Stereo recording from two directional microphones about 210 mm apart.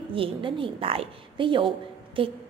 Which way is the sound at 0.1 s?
25° right (ahead or behind).